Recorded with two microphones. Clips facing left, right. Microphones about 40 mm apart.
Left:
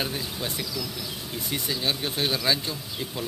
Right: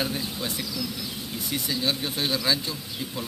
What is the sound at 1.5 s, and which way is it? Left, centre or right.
Speech, centre.